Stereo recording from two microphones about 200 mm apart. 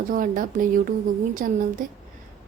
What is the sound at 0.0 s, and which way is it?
A woman's voice, 45° right (ahead or behind).